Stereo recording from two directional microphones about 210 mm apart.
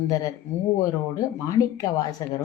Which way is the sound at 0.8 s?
15° left (ahead or behind).